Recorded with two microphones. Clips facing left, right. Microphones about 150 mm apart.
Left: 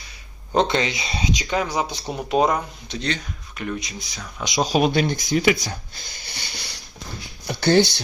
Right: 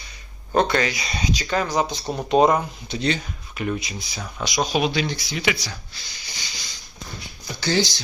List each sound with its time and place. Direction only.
0.5 s speech: 20° left (ahead or behind); by 4.4 s 5° right (ahead or behind)
4.6 s speech: 35° left (ahead or behind)
4.9 s speech: 50° left (ahead or behind)
7.4 s a sound: 60° left (ahead or behind)